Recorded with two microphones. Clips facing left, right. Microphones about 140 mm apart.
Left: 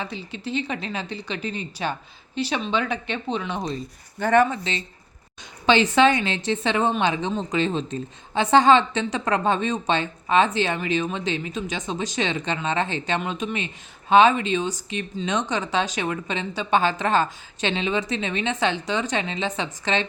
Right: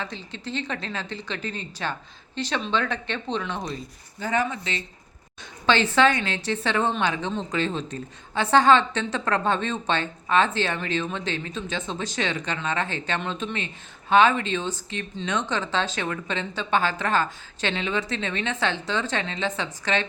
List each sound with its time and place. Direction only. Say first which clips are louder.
0.0 s a woman's voice: left 3 dB; 10° left (ahead or behind)
4.2 s speech: left 7 dB; 60° left (ahead or behind)
4.5 s a woman's voice: left 3 dB; 25° left (ahead or behind)
5.6 s a woman's voice: left 3 dB; 15° left (ahead or behind)